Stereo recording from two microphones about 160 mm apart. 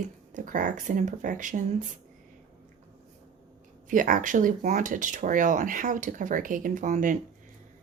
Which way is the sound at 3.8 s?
55° right (ahead or behind).